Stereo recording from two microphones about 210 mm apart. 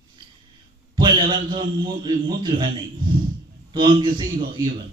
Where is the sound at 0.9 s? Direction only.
20° right (ahead or behind).